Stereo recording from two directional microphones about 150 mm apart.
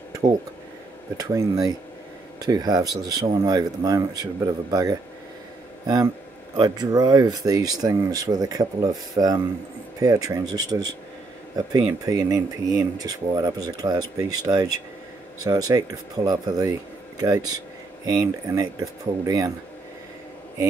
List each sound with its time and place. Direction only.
0.1 s a sound: 25° right (ahead or behind)
1.1 s speech: 25° right (ahead or behind)
6.5 s speech: 25° right (ahead or behind)